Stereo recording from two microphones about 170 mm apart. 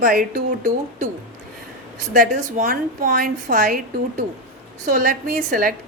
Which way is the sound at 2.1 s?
50° right (ahead or behind).